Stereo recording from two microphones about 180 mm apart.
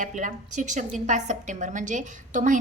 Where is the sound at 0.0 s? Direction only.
45° right (ahead or behind).